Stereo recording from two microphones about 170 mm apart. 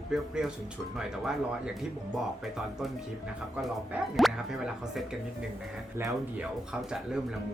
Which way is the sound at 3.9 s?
Centre (ahead or behind).